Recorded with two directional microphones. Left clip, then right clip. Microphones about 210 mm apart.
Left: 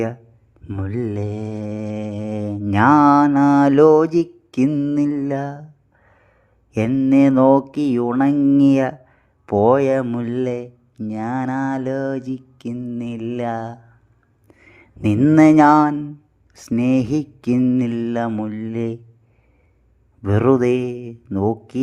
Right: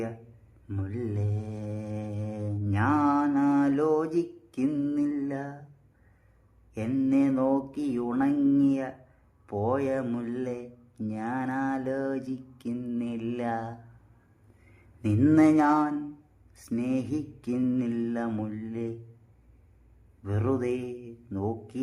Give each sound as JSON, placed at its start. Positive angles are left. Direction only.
{"t": 0.7, "sound": "mantra", "side_deg": 35}
{"t": 6.7, "sound": "mantra", "side_deg": 35}
{"t": 8.5, "sound": "speech", "side_deg": 45}
{"t": 9.5, "sound": "mantra", "side_deg": 40}
{"t": 10.1, "sound": "speech", "side_deg": 30}
{"t": 15.2, "sound": "mantra", "side_deg": 35}
{"t": 20.2, "sound": "speech", "side_deg": 45}
{"t": 21.2, "sound": "mantra", "side_deg": 40}